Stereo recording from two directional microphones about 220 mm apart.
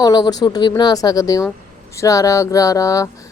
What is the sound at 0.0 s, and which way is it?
A woman's voice, 15° left (ahead or behind).